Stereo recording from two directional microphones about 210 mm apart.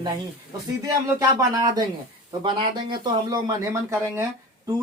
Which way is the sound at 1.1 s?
15° right (ahead or behind).